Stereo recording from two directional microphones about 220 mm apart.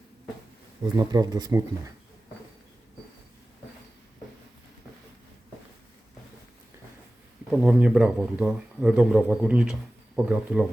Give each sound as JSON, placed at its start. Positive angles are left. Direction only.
{"t": 0.9, "sound": "speech", "side_deg": -15}
{"t": 7.5, "sound": "speech", "side_deg": -5}